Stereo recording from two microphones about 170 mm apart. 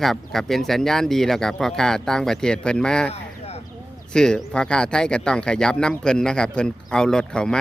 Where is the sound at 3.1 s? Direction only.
40° left (ahead or behind).